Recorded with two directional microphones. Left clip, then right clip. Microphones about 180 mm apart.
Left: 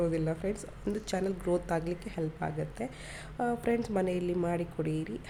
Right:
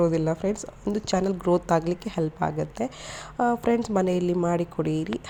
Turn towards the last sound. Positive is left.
turn(degrees=-15)  # may be behind; listen again after turning